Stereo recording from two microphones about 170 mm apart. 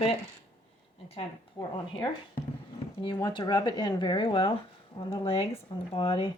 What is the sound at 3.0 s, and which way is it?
Speech, 25° left (ahead or behind).